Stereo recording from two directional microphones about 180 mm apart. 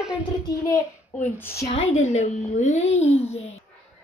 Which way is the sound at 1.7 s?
35° left (ahead or behind).